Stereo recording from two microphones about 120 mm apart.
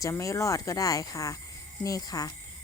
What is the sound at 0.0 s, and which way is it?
Speech, 25° left (ahead or behind).